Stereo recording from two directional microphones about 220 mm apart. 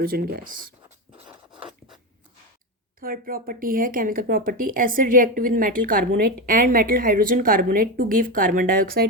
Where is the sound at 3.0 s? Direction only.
40° right (ahead or behind).